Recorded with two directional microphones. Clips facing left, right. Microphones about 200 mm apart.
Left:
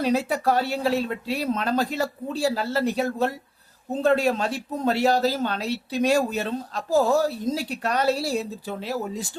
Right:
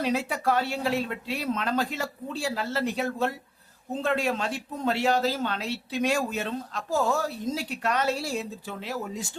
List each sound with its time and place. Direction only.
0.0 s speech: 40° left (ahead or behind)